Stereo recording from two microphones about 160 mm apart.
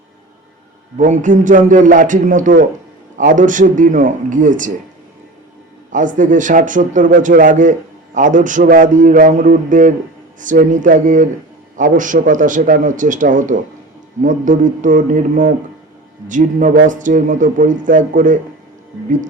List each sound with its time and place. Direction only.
0.9 s a man's voice: 50° right (ahead or behind)
5.9 s a man's voice: 55° right (ahead or behind)